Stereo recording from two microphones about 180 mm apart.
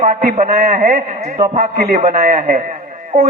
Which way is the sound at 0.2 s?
45° right (ahead or behind).